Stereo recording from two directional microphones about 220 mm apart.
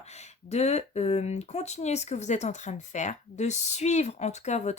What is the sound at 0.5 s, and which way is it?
Speech, 30° left (ahead or behind).